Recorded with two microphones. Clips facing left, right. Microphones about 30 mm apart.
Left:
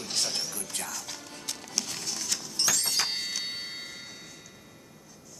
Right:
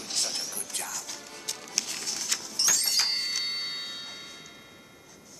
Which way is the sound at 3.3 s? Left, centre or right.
Centre.